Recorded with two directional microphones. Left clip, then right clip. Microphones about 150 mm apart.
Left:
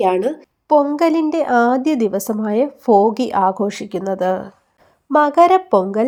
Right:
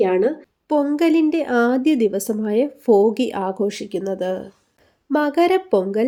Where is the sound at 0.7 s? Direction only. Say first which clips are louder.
Left 4 dB; 5° left (ahead or behind).